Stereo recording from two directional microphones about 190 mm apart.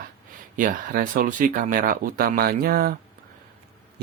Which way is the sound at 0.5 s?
45° right (ahead or behind).